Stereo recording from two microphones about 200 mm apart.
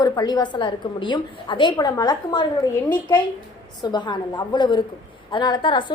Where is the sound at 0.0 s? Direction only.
20° left (ahead or behind).